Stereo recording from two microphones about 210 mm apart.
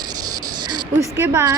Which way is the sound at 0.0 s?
20° right (ahead or behind).